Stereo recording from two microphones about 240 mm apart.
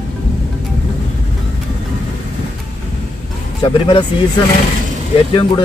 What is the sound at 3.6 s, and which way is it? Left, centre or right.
Speech, centre.